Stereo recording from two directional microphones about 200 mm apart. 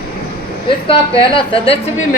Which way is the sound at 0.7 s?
25° left (ahead or behind).